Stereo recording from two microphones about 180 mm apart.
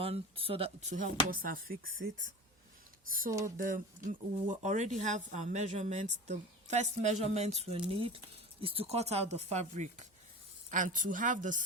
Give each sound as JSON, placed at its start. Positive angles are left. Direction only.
{"t": 0.0, "sound": "a woman's voice", "side_deg": -30}
{"t": 3.1, "sound": "a woman's voice", "side_deg": -50}